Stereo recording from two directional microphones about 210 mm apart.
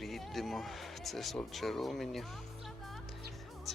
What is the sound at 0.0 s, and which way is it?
Speech, centre (ahead or behind).